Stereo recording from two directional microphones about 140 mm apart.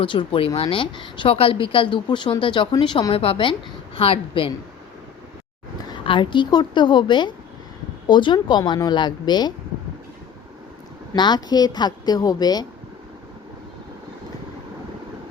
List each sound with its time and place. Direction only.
0.0 s a woman's voice: 35° left (ahead or behind)
5.9 s a woman's voice: 35° left (ahead or behind)
11.1 s a woman's voice: 30° left (ahead or behind)